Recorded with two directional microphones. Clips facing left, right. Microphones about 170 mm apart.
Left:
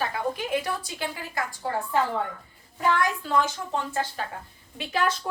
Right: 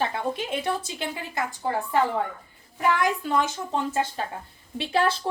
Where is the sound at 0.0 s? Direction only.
25° right (ahead or behind).